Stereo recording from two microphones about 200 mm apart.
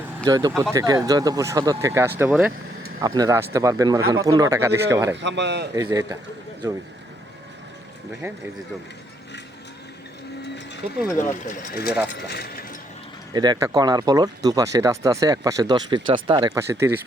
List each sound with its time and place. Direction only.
0.3 s speech: 20° right (ahead or behind)
5.1 s speech: 60° right (ahead or behind)
5.7 s speech: 15° right (ahead or behind)
8.2 s speech: 15° right (ahead or behind)
10.8 s speech: 40° right (ahead or behind)
11.3 s speech: 40° left (ahead or behind)
13.3 s speech: 20° right (ahead or behind)